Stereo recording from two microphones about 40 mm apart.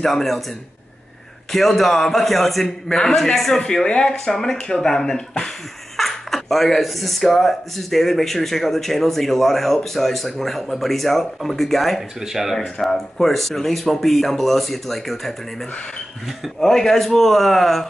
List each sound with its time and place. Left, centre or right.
0.0 s speech: centre
1.5 s speech: centre
3.6 s speech: left
5.9 s speech: centre
12.2 s speech: centre
12.8 s speech: centre
16.5 s speech: centre